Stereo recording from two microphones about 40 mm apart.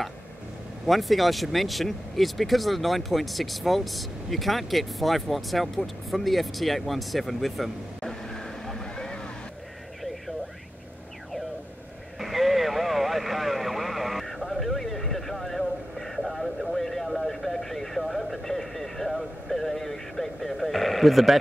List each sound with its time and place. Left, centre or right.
0.8 s speech: centre
8.0 s vehicle: centre
12.2 s vehicle: centre
14.2 s a sound: centre